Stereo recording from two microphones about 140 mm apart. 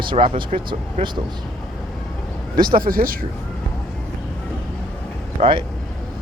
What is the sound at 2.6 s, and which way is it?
Speech, 90° right.